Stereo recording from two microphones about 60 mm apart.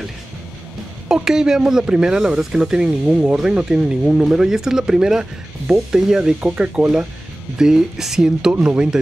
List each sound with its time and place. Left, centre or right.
1.0 s speech: centre
3.3 s speech: centre